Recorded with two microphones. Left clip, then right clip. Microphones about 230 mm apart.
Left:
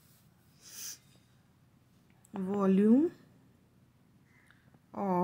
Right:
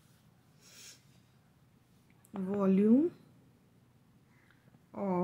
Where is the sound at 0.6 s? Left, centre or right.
Left.